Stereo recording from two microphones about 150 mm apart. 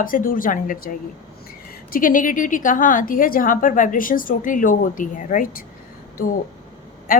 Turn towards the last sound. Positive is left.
turn(degrees=70)  # may be behind; listen again after turning